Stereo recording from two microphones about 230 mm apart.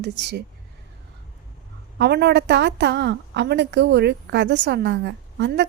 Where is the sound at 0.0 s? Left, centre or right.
Right.